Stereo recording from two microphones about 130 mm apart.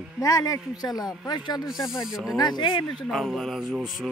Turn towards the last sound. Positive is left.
turn(degrees=-5)  # may be behind; listen again after turning